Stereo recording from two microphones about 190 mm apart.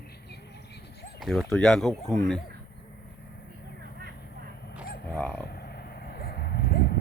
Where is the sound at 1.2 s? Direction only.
Centre (ahead or behind).